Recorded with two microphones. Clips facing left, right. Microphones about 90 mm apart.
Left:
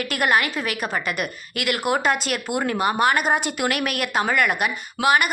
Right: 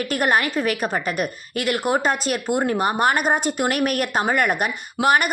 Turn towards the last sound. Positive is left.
turn(degrees=-40)  # may be behind; listen again after turning